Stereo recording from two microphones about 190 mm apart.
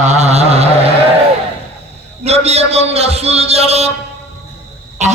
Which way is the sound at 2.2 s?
35° right (ahead or behind).